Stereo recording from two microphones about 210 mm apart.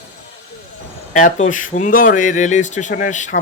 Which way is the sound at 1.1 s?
40° left (ahead or behind).